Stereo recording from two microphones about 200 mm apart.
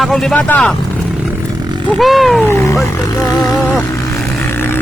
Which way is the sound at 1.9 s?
Centre (ahead or behind).